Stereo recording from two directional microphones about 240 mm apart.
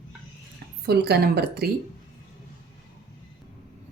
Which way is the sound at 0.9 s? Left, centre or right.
Right.